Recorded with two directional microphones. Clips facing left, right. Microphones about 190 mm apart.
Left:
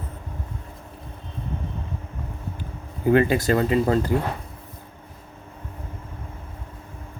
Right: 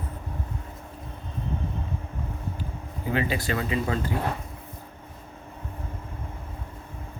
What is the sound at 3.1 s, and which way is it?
Speech, 50° left (ahead or behind).